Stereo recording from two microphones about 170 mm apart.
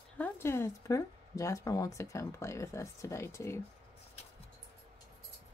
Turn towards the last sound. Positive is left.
turn(degrees=15)  # may be behind; listen again after turning